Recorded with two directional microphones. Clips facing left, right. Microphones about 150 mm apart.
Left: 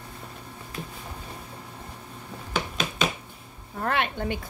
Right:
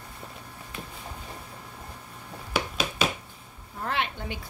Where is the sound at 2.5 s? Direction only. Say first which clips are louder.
Right 1 dB; 5° right (ahead or behind).